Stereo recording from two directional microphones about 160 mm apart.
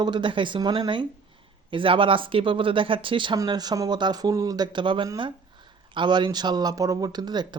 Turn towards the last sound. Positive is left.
turn(degrees=-25)  # may be behind; listen again after turning